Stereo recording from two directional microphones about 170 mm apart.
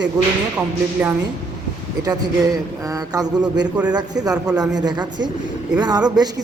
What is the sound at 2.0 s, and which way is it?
Speech, 20° right (ahead or behind).